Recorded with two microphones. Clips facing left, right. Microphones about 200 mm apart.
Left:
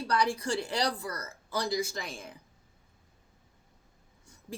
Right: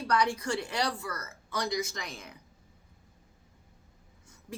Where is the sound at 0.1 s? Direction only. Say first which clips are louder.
Right 1 dB; 30° left (ahead or behind).